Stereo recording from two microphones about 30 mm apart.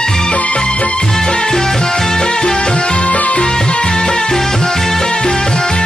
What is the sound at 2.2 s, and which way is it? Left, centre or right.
Music, left.